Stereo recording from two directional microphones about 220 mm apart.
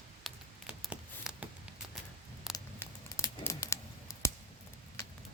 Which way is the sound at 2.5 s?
15° left (ahead or behind).